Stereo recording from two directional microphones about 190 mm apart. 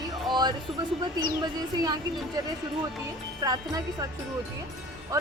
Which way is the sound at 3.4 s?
20° right (ahead or behind).